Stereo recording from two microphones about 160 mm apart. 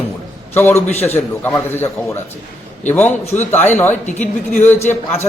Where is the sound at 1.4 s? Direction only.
15° left (ahead or behind).